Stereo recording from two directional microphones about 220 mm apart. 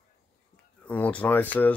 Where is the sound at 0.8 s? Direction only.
5° left (ahead or behind).